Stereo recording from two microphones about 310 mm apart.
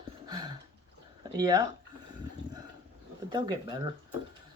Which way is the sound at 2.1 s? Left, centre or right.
Centre.